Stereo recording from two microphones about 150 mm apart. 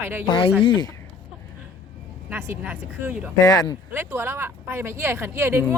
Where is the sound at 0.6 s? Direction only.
30° left (ahead or behind).